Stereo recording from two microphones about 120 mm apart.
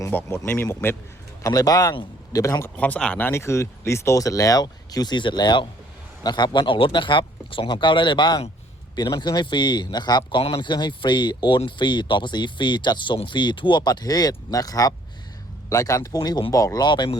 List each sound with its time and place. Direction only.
0.1 s speech: 20° left (ahead or behind)
1.4 s speech: 30° left (ahead or behind)
2.7 s speech: 10° left (ahead or behind); by 17.1 s 35° left (ahead or behind)